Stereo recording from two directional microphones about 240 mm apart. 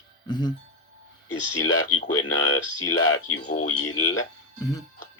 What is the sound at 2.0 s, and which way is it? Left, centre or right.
Speech, left.